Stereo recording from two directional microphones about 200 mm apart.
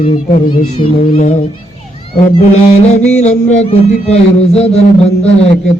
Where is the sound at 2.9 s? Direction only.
35° left (ahead or behind).